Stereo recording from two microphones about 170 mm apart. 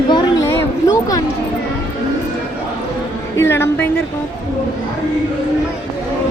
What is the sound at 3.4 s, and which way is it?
Speech, 15° left (ahead or behind).